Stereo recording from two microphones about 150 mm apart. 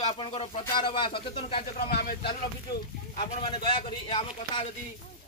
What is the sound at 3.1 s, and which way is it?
Speech, 35° left (ahead or behind).